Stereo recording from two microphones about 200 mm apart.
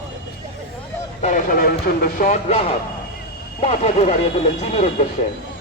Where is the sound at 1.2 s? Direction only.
40° left (ahead or behind).